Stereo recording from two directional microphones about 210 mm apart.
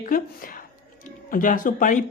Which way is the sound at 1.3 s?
40° left (ahead or behind).